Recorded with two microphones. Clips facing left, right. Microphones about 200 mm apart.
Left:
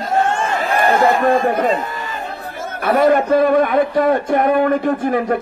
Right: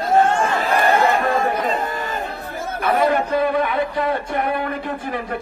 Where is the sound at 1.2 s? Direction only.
45° left (ahead or behind).